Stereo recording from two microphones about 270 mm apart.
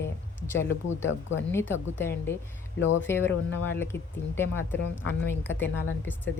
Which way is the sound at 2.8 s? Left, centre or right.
Left.